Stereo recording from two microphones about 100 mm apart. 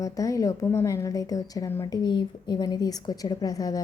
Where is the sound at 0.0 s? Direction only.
35° left (ahead or behind).